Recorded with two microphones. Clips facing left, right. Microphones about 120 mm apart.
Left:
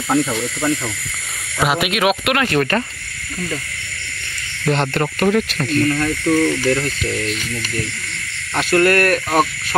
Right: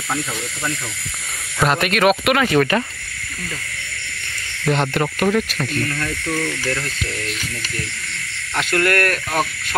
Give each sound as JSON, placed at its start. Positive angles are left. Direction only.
{"t": 1.6, "sound": "speech", "side_deg": 5}
{"t": 4.6, "sound": "speech", "side_deg": -5}
{"t": 5.9, "sound": "speech", "side_deg": 15}
{"t": 8.7, "sound": "speech", "side_deg": 25}